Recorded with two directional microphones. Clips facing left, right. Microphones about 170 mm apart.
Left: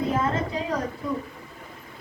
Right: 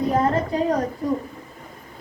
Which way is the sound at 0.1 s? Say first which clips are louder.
Right 5 dB; 35° right (ahead or behind).